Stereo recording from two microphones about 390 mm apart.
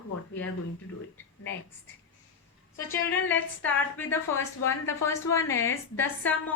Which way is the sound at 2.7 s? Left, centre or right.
Centre.